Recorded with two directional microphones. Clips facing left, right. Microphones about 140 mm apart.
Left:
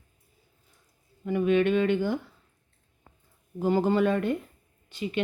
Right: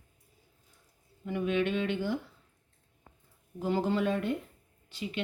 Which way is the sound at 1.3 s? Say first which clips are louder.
Left 7 dB; 55° left (ahead or behind).